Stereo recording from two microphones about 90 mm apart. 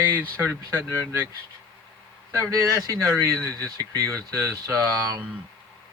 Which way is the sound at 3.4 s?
35° right (ahead or behind).